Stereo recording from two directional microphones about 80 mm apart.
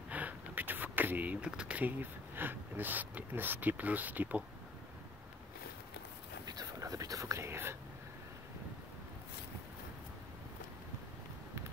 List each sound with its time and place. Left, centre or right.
0.1 s speech: right
6.4 s whispering: right